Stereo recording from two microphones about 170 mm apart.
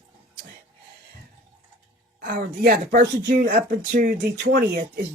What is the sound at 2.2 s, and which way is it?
Speech, 60° right (ahead or behind).